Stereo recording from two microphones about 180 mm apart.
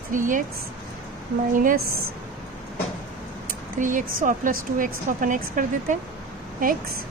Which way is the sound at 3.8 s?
45° right (ahead or behind).